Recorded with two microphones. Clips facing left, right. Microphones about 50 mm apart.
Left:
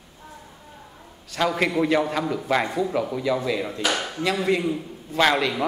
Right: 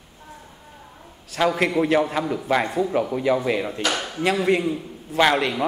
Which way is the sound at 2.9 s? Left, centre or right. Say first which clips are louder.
Right 3 dB; right.